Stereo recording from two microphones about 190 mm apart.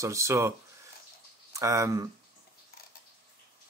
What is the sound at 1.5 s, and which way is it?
Speech, 15° right (ahead or behind).